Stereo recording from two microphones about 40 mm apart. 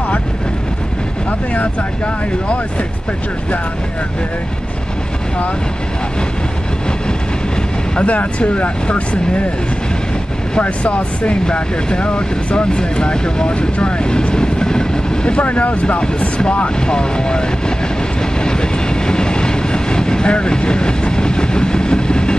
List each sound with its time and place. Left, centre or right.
7.9 s speech: left
10.6 s speech: left
15.4 s speech: left; by 17.7 s centre
18.4 s train: centre